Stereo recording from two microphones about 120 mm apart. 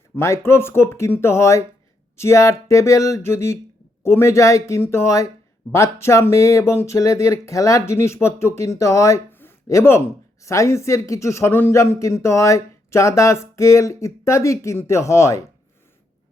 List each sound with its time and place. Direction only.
0.2 s speech: 20° left (ahead or behind)